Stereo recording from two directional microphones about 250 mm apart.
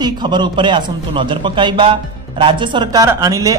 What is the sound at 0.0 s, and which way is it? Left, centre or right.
A man's voice, centre.